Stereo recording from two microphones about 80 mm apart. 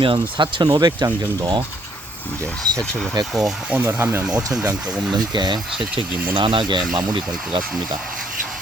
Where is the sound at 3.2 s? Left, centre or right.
Right.